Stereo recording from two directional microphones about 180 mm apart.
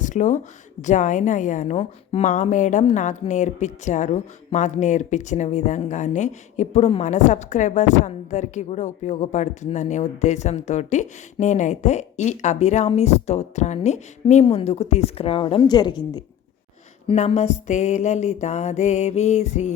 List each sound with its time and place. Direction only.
0.0 s a woman's voice: 45° left (ahead or behind); by 16.2 s 25° left (ahead or behind)
17.1 s a woman's voice: 35° left (ahead or behind)